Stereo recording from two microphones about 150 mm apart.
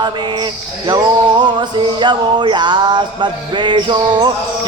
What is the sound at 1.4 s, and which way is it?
Music, 30° right (ahead or behind).